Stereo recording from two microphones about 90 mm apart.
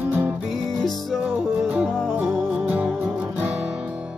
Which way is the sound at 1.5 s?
15° right (ahead or behind).